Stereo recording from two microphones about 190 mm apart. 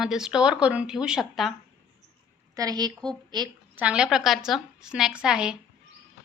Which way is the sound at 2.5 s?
20° right (ahead or behind).